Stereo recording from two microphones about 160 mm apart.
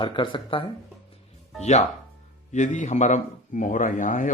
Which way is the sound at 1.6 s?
45° left (ahead or behind).